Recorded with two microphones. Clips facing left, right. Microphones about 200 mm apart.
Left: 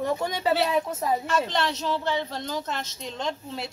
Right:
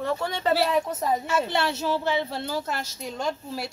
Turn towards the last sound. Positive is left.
turn(degrees=-5)  # may be behind; listen again after turning